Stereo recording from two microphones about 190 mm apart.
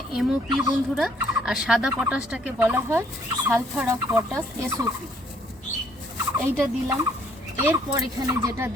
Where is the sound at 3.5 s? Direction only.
10° right (ahead or behind).